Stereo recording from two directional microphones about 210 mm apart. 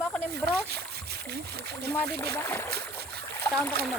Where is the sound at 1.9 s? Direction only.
10° left (ahead or behind).